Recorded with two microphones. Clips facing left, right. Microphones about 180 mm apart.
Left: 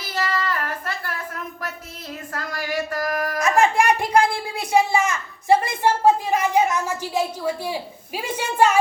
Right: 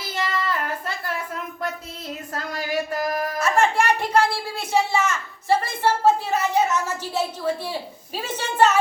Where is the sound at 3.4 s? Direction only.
10° left (ahead or behind).